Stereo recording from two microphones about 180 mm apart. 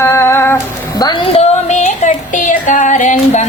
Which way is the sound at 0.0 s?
15° left (ahead or behind).